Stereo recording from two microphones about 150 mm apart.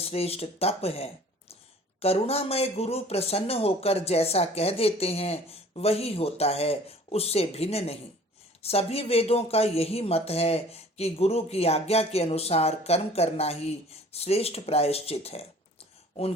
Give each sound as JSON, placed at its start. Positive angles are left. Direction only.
{"t": 0.0, "sound": "speech", "side_deg": 40}